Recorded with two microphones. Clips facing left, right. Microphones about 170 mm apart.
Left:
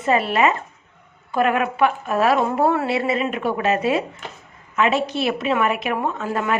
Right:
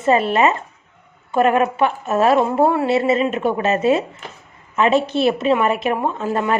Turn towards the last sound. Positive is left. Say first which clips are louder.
# right 3 dB
turn(degrees=-25)  # may be behind; listen again after turning